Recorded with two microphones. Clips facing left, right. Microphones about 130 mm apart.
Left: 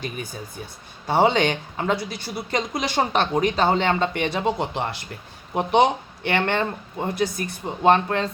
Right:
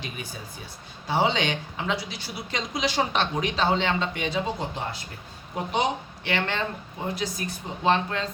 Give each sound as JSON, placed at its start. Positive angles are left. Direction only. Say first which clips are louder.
{"t": 1.0, "sound": "speech", "louder": "left 5 dB", "side_deg": 55}